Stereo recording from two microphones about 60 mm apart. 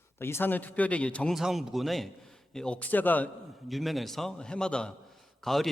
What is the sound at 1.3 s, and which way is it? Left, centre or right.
A man's voice, centre.